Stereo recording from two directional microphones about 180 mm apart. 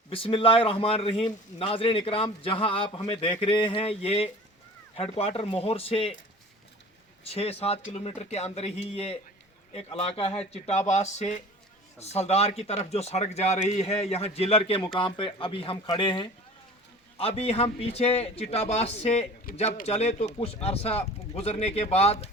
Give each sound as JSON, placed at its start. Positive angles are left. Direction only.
{"t": 0.1, "sound": "a man's voice", "side_deg": 30}
{"t": 7.3, "sound": "a man's voice", "side_deg": 35}